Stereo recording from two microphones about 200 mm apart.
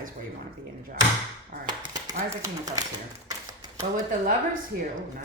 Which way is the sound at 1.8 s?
20° right (ahead or behind).